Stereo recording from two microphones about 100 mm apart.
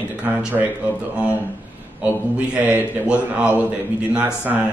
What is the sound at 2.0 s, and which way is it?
A man's voice, 15° right (ahead or behind).